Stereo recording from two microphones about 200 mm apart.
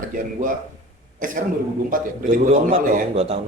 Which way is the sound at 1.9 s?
40° right (ahead or behind).